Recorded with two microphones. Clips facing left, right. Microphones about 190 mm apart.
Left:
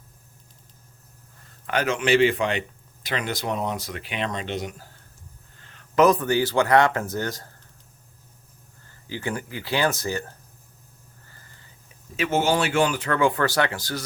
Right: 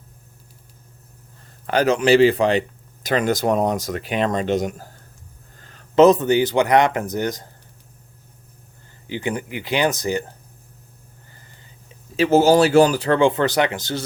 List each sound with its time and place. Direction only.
1.6 s speech: 35° right (ahead or behind)
5.5 s a sound: 40° right (ahead or behind)
6.0 s speech: 25° right (ahead or behind)
9.0 s speech: 20° right (ahead or behind)
11.3 s a sound: 20° right (ahead or behind)
12.1 s speech: 35° right (ahead or behind)